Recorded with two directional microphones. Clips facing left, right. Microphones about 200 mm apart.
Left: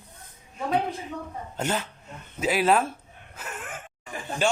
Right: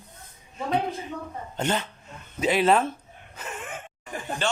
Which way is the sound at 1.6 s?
5° left (ahead or behind).